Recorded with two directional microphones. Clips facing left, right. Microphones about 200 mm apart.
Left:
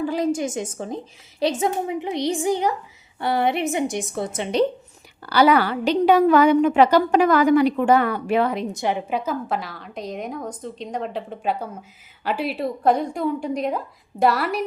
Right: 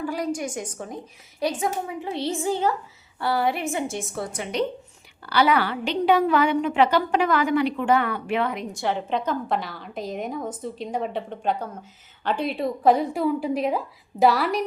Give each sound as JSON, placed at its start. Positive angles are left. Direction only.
{"t": 0.0, "sound": "a woman's voice", "side_deg": 25}
{"t": 5.2, "sound": "a woman's voice", "side_deg": 40}
{"t": 8.7, "sound": "a woman's voice", "side_deg": 15}